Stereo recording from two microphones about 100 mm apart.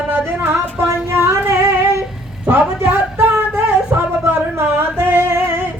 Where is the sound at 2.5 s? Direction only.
20° right (ahead or behind).